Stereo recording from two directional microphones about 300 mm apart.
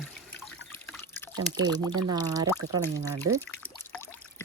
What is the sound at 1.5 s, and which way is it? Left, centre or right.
Speech, centre.